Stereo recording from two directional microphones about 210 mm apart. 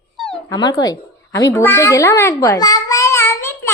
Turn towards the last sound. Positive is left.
turn(degrees=10)  # may be behind; listen again after turning